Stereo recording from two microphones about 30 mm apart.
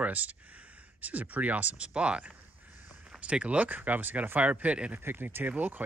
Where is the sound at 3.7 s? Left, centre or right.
Right.